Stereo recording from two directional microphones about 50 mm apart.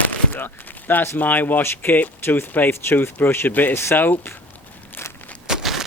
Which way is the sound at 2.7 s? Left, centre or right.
Left.